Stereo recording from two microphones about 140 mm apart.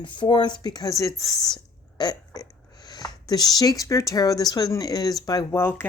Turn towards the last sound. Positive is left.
turn(degrees=20)  # may be behind; listen again after turning